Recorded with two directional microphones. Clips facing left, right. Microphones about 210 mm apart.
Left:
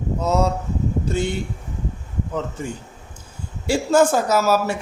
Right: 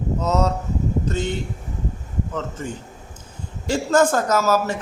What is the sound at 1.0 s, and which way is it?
Speech, 10° left (ahead or behind).